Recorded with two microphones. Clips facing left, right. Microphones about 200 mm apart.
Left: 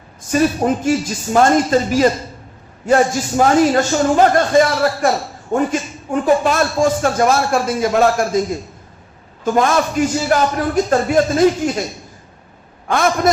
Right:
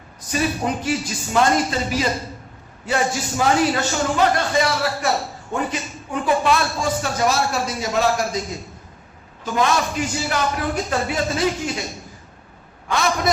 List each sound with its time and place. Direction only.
0.3 s a man's voice: 45° left (ahead or behind)
9.4 s a man's voice: 50° left (ahead or behind)
12.9 s a man's voice: 50° left (ahead or behind)